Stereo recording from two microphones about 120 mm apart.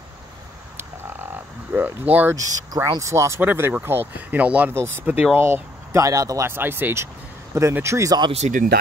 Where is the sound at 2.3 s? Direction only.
30° right (ahead or behind).